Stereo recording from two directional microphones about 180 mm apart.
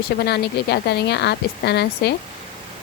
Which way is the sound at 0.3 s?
65° left (ahead or behind).